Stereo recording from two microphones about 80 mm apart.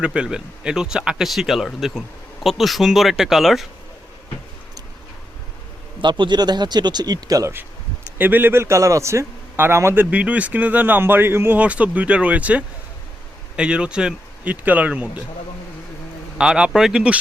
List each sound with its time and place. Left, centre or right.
0.0 s speech: centre
6.0 s speech: right
8.2 s a man's voice: right
16.4 s speech: centre